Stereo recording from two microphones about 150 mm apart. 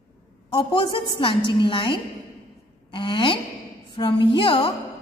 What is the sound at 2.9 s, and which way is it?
A woman's voice, 35° left (ahead or behind).